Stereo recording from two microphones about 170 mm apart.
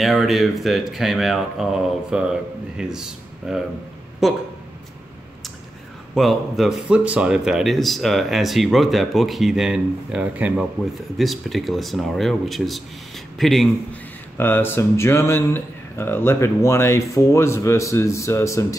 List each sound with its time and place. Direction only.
0.0 s speech: centre (ahead or behind)
6.1 s speech: centre (ahead or behind)
14.3 s speech: 10° left (ahead or behind)